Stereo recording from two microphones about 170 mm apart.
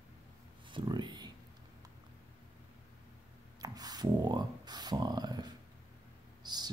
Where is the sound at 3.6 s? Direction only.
20° right (ahead or behind).